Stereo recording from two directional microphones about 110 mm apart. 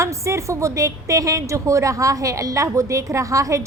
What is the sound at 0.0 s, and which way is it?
A woman's voice, 25° right (ahead or behind).